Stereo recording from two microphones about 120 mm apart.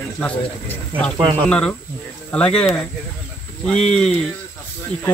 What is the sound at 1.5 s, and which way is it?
Speech, 10° left (ahead or behind).